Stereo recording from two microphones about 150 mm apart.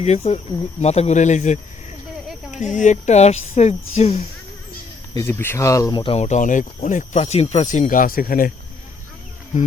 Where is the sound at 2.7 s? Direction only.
55° left (ahead or behind).